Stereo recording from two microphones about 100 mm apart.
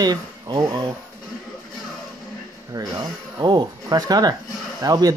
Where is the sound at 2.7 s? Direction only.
40° right (ahead or behind).